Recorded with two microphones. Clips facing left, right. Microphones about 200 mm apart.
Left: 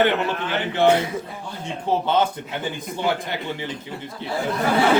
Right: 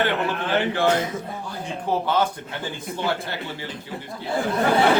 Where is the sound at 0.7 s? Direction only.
20° left (ahead or behind).